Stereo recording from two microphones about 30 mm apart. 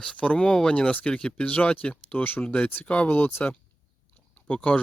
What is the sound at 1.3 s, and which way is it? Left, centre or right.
Speech, left.